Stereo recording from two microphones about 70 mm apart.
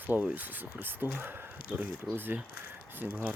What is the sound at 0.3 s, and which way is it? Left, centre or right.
Speech, right.